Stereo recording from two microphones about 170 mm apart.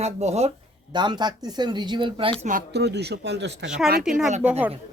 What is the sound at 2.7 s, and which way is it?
Speech, 80° right.